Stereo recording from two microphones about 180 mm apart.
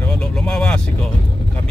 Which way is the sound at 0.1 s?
5° left (ahead or behind).